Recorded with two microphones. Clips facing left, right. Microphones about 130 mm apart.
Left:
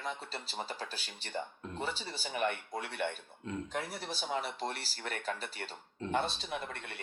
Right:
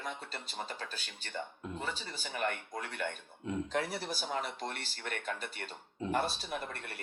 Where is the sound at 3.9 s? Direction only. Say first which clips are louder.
Even; 5° right (ahead or behind).